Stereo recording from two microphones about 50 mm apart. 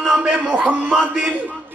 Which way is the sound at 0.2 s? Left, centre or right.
Centre.